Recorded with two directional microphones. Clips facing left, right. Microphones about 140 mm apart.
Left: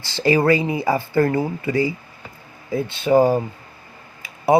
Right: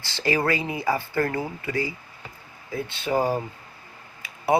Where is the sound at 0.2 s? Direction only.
25° left (ahead or behind).